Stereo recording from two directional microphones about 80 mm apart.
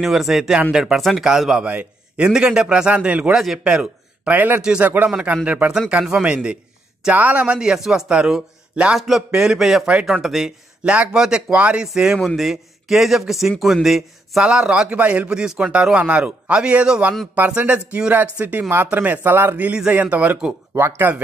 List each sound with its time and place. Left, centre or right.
0.0 s a man's voice: centre
3.3 s a man's voice: centre
4.8 s a man's voice: right; by 10.5 s centre
10.8 s a man's voice: centre